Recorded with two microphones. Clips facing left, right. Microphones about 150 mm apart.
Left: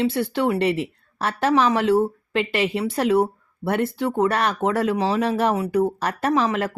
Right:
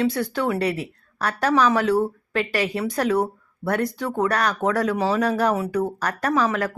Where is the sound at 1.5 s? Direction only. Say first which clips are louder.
Left 1 dB; 25° left (ahead or behind).